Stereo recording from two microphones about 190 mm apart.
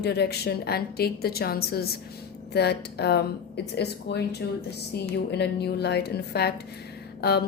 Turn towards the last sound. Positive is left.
turn(degrees=60)  # may be behind; listen again after turning